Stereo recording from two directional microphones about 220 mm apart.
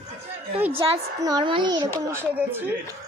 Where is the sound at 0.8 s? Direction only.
20° right (ahead or behind).